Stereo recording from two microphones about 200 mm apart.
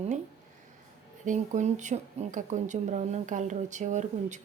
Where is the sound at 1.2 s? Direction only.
40° right (ahead or behind).